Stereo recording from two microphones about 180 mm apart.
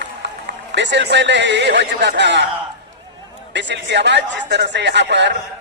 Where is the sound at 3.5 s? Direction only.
75° right (ahead or behind).